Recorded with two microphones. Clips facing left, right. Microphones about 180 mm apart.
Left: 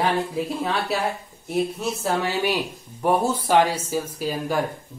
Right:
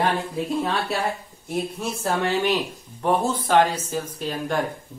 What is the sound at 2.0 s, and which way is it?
Speech, 5° left (ahead or behind).